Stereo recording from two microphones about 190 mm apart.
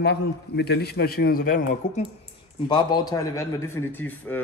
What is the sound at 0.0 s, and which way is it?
A man's voice, 60° left (ahead or behind).